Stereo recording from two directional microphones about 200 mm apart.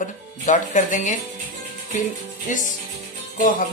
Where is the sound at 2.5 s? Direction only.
40° left (ahead or behind).